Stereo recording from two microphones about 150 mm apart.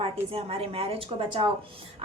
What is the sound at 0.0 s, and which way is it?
A woman's voice, 40° right (ahead or behind).